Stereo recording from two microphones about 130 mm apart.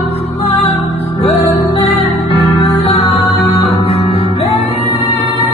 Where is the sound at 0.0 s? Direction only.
55° left (ahead or behind).